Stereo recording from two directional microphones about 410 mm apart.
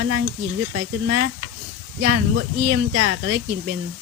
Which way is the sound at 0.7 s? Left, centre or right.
Right.